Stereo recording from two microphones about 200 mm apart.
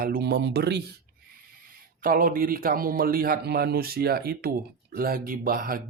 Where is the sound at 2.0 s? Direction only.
45° right (ahead or behind).